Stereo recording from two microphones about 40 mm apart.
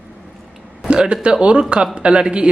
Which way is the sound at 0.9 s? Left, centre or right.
Right.